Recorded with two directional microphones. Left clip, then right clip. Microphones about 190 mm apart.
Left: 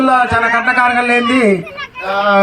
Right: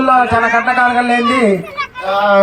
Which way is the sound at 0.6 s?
55° left (ahead or behind).